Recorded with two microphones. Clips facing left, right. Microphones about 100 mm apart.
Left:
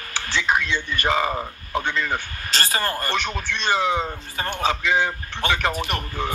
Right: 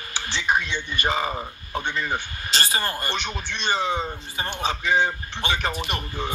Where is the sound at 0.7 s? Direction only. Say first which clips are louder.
Left 3 dB; 90° left.